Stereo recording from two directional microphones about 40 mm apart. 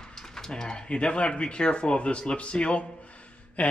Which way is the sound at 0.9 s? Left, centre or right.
Left.